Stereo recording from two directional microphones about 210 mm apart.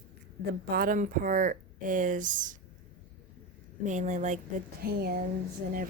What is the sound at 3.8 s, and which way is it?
Speech, 35° right (ahead or behind).